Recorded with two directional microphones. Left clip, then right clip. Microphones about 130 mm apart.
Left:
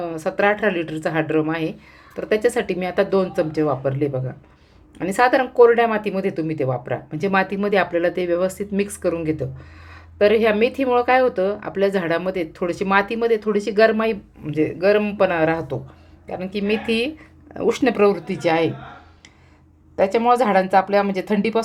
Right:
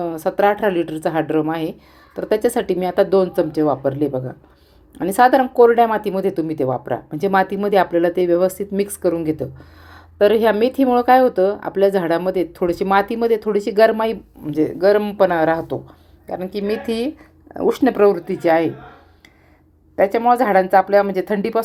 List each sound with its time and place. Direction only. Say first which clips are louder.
0.0 s speech: right 3 dB; 40° right (ahead or behind)
9.9 s speech: right 2 dB; 45° right (ahead or behind)
16.2 s speech: right 2 dB; 35° right (ahead or behind)
17.7 s speech: right 3 dB; 25° right (ahead or behind)
20.0 s speech: right 2 dB; 30° right (ahead or behind)